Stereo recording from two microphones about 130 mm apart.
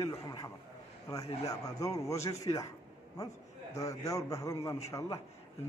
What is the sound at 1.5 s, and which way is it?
Speech, 25° left (ahead or behind).